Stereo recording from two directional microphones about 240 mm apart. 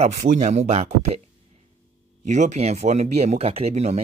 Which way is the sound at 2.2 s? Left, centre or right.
Right.